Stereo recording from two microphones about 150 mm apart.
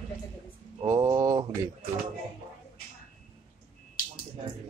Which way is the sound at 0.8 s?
20° right (ahead or behind).